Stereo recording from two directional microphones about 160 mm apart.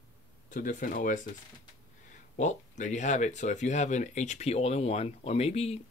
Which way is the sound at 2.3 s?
50° left (ahead or behind).